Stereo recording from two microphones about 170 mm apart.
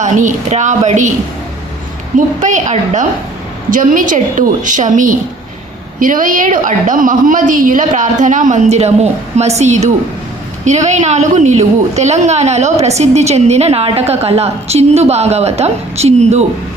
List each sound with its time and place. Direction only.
0.0 s a woman's voice: 45° right (ahead or behind)
2.1 s a woman's voice: 45° right (ahead or behind)